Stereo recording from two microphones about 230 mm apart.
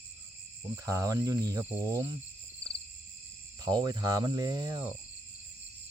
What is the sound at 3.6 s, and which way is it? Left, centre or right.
Speech, centre.